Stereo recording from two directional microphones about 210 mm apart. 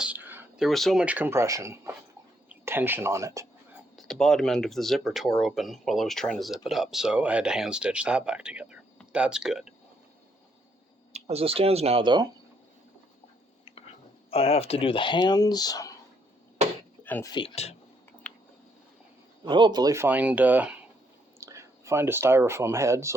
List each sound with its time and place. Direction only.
0.0 s speech: 10° right (ahead or behind)
3.9 s speech: centre (ahead or behind)
11.1 s speech: 30° right (ahead or behind)
14.3 s speech: 25° left (ahead or behind)
17.0 s a sound: 10° left (ahead or behind)
17.3 s speech: 25° left (ahead or behind)
18.3 s a sound: 5° left (ahead or behind)
19.5 s speech: 20° right (ahead or behind)